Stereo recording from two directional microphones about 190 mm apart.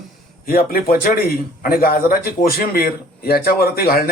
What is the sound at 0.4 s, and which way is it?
A man's voice, 50° left (ahead or behind).